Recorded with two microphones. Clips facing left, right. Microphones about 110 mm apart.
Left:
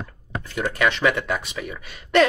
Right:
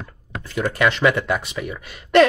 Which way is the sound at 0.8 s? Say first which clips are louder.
Right 3 dB; 15° right (ahead or behind).